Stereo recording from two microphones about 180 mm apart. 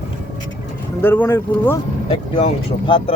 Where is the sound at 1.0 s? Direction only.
10° left (ahead or behind).